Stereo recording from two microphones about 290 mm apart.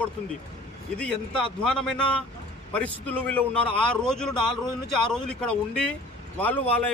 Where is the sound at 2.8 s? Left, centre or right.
Centre.